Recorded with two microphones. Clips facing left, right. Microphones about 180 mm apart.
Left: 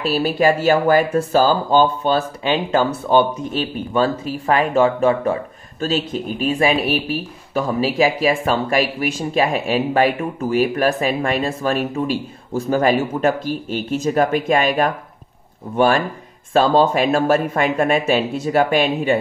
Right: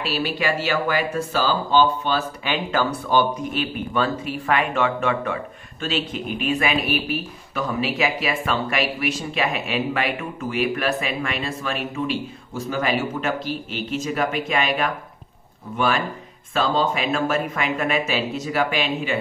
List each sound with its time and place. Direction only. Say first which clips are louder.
0.0 s speech: left 7 dB; 45° left (ahead or behind)
2.1 s speech: left 5 dB; 25° left (ahead or behind)
18.5 s speech: left 7 dB; 50° left (ahead or behind)